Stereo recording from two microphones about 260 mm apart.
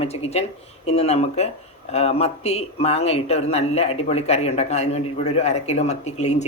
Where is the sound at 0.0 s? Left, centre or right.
Left.